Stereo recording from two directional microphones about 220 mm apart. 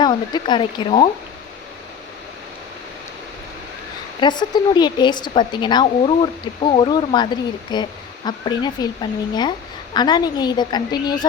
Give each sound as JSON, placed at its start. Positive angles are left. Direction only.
{"t": 0.0, "sound": "speech", "side_deg": 20}
{"t": 4.2, "sound": "speech", "side_deg": 20}